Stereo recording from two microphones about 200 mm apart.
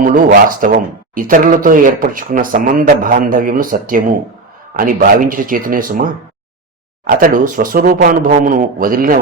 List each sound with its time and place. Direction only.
0.0 s speech: 40° right (ahead or behind)